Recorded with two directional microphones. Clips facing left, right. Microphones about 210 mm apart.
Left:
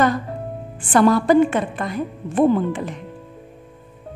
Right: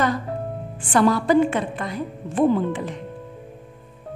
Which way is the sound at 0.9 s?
50° left (ahead or behind).